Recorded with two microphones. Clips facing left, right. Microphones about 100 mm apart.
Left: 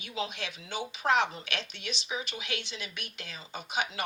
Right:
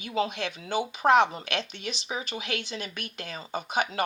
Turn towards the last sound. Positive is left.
turn(degrees=-45)  # may be behind; listen again after turning